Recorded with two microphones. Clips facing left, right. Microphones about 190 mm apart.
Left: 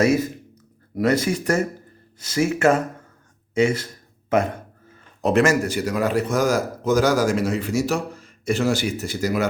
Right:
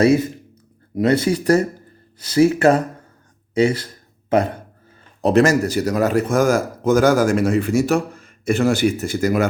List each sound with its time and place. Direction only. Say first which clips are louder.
0.0 s a man's voice: right 4 dB; 30° right (ahead or behind); by 9.5 s 50° right (ahead or behind)